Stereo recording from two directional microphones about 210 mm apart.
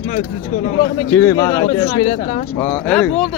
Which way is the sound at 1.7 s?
35° left (ahead or behind).